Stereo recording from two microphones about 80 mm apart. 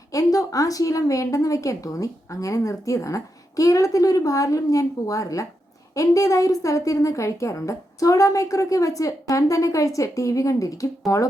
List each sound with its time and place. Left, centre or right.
0.1 s a woman's voice: left